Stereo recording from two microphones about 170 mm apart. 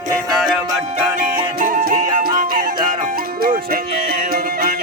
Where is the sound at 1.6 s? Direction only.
55° right (ahead or behind).